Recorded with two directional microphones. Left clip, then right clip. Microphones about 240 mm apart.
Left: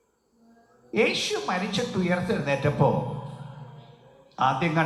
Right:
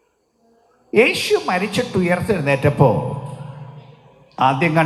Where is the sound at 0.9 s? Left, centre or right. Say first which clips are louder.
Right 9 dB; right.